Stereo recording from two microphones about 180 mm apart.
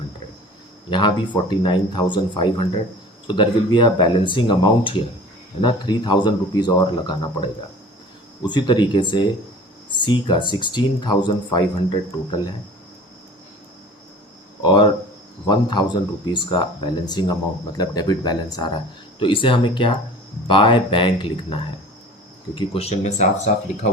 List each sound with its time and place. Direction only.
0.9 s speech: 25° left (ahead or behind)
14.6 s speech: 25° left (ahead or behind)